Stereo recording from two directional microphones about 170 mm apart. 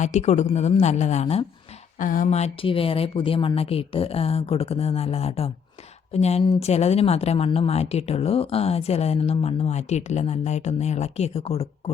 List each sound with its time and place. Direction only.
0.0 s speech: 45° left (ahead or behind)
2.0 s speech: 50° left (ahead or behind); by 11.7 s 35° left (ahead or behind)